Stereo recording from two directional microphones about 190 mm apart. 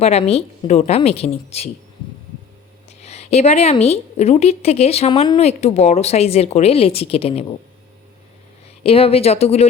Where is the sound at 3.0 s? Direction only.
35° left (ahead or behind).